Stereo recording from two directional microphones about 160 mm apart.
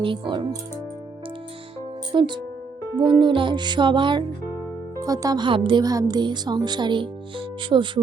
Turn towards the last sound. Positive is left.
turn(degrees=-30)  # may be behind; listen again after turning